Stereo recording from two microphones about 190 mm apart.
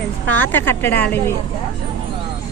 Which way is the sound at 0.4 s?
10° left (ahead or behind).